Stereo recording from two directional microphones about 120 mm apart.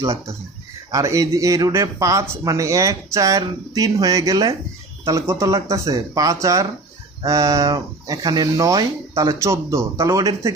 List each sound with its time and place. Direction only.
0.0 s speech: 25° right (ahead or behind)